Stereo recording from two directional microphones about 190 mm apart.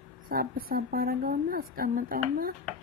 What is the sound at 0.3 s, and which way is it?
Speech, 50° right (ahead or behind).